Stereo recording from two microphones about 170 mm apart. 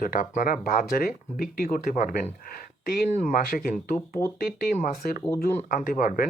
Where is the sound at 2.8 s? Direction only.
65° left (ahead or behind).